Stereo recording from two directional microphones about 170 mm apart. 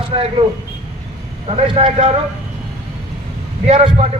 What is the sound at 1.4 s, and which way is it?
Speech, 35° right (ahead or behind).